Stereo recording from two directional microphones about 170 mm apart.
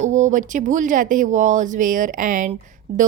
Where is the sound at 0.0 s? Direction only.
45° right (ahead or behind).